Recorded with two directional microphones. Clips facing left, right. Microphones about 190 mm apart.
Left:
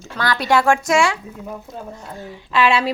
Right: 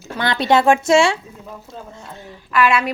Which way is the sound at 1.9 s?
10° left (ahead or behind).